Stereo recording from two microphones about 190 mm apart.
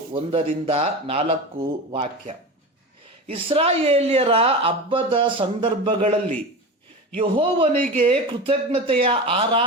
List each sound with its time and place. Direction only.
0.1 s speech: 30° right (ahead or behind)
7.2 s speech: 25° right (ahead or behind)